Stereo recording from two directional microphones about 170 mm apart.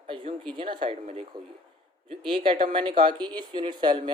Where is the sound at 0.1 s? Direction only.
35° right (ahead or behind).